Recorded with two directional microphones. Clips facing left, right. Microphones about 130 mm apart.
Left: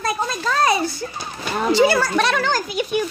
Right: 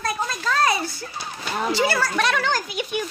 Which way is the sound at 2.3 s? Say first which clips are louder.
Left 3 dB; 35° left (ahead or behind).